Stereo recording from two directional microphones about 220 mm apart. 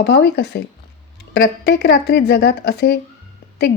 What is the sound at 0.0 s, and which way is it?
A woman's voice, 50° left (ahead or behind).